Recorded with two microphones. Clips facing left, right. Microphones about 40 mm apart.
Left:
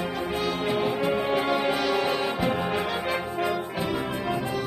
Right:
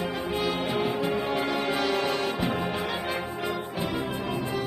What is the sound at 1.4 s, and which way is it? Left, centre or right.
Music, centre.